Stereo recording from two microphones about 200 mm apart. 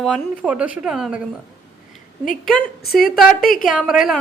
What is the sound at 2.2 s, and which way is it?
Speech, 40° left (ahead or behind).